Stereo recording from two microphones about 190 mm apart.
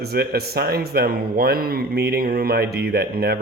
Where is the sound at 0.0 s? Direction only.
55° right (ahead or behind).